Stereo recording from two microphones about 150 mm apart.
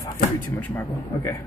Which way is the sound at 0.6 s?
15° left (ahead or behind).